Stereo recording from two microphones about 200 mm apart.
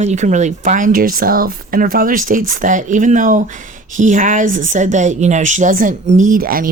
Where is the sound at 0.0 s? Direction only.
35° right (ahead or behind).